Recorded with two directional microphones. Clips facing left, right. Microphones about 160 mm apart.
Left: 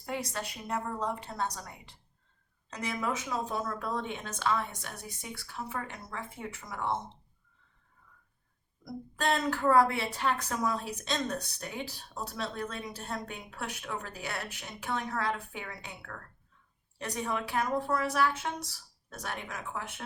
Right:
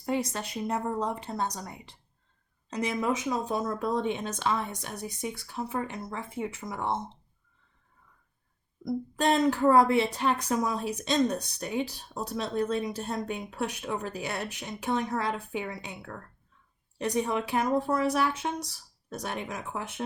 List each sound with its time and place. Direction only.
0.0 s speech: 25° right (ahead or behind)
8.8 s speech: 20° right (ahead or behind)